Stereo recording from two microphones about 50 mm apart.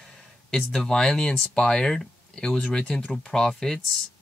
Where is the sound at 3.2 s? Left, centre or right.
Centre.